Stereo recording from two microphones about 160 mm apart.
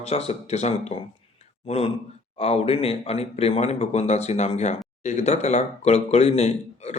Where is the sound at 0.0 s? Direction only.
40° left (ahead or behind).